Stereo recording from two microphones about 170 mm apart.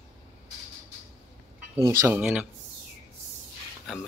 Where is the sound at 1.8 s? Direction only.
15° right (ahead or behind).